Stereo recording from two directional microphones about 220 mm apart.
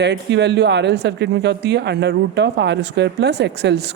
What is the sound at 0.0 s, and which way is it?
Speech, 50° right (ahead or behind).